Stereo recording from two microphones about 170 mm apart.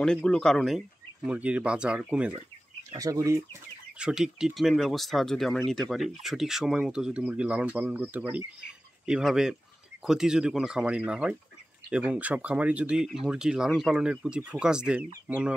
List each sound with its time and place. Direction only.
0.0 s speech: 5° left (ahead or behind)
2.9 s speech: 20° right (ahead or behind)
4.0 s speech: 5° right (ahead or behind)